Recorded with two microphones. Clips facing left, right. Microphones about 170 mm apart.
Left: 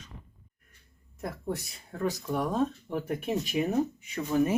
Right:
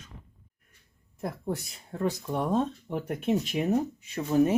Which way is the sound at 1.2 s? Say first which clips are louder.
Right 2 dB; 25° right (ahead or behind).